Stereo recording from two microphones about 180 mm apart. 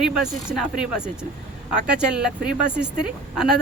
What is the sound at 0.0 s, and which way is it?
Speech, 5° right (ahead or behind).